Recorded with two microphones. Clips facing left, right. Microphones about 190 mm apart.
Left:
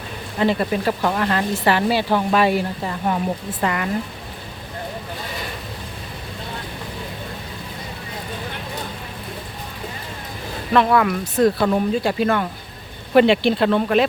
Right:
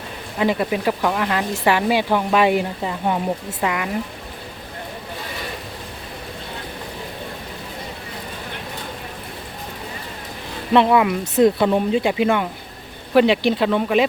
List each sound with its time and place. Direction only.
0.3 s speech: 10° right (ahead or behind)
3.6 s speech: 5° right (ahead or behind)
10.8 s speech: 15° right (ahead or behind)